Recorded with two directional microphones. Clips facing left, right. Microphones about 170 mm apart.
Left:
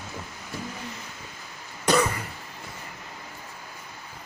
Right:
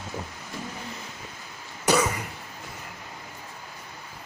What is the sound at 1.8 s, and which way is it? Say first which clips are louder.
Cough: even; centre (ahead or behind).